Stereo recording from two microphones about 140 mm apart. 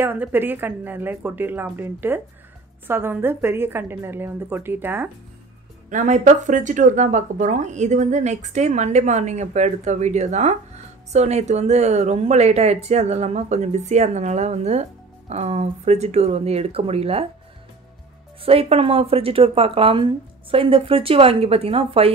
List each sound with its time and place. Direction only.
0.0 s speech: 15° right (ahead or behind)
5.9 s speech: 60° right (ahead or behind)
18.4 s speech: 45° right (ahead or behind)